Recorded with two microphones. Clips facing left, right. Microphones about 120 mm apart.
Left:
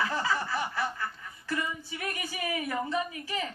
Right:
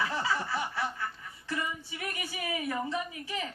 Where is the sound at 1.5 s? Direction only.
15° right (ahead or behind).